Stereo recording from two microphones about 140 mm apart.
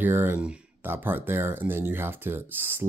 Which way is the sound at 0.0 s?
15° right (ahead or behind).